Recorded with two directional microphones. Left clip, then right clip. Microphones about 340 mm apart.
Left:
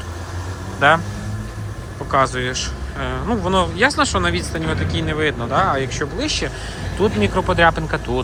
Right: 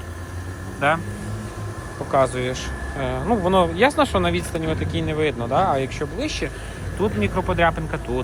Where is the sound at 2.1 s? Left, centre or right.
Centre.